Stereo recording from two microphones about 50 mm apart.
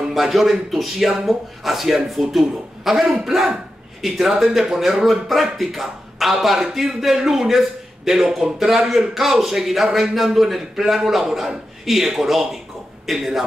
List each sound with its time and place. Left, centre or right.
0.1 s a man's voice: centre